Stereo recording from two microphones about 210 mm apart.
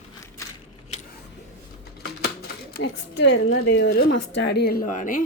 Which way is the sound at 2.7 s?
55° left (ahead or behind).